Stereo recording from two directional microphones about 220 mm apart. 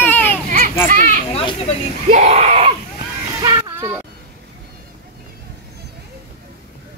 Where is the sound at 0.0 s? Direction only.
10° left (ahead or behind).